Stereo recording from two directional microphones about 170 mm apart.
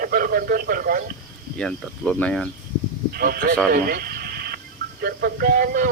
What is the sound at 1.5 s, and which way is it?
Speech, 5° left (ahead or behind).